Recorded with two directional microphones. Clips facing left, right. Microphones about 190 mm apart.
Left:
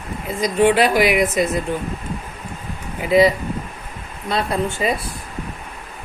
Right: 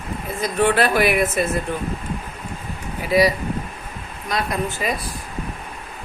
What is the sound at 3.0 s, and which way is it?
Speech, 20° left (ahead or behind).